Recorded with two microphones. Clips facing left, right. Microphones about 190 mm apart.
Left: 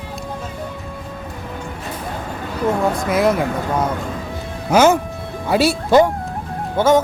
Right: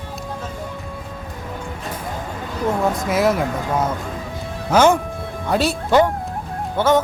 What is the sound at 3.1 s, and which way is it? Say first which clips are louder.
Speech: left 2 dB; centre (ahead or behind).